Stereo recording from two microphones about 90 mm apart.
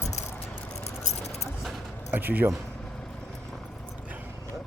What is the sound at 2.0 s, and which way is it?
Speech, 20° right (ahead or behind).